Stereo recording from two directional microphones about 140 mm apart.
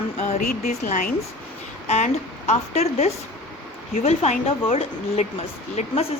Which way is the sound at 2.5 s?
50° left (ahead or behind).